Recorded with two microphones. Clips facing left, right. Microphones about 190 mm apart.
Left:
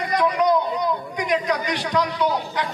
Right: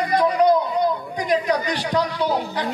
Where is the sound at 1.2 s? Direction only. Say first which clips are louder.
Right 3 dB; 35° right (ahead or behind).